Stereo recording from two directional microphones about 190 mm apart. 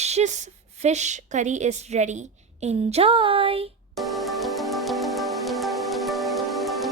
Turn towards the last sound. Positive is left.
turn(degrees=0)  # may be behind; listen again after turning